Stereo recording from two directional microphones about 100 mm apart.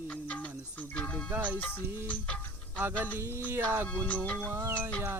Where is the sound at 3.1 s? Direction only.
25° right (ahead or behind).